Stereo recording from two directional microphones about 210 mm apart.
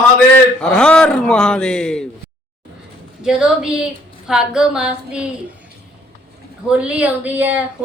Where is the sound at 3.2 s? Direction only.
5° right (ahead or behind).